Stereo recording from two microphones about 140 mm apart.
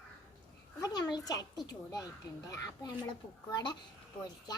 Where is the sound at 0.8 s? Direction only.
30° left (ahead or behind).